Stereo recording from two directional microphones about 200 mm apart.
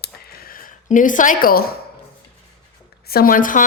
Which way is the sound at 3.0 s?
50° left (ahead or behind).